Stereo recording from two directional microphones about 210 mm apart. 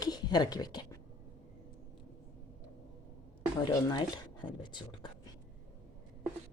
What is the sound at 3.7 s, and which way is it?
Speech, 20° left (ahead or behind).